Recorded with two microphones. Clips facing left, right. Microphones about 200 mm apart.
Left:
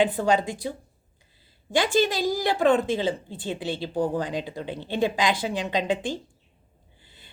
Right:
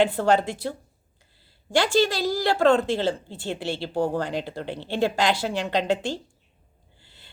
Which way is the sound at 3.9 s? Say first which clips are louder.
Right 1 dB; 15° left (ahead or behind).